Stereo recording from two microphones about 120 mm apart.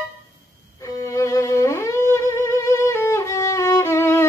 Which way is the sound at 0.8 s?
25° left (ahead or behind).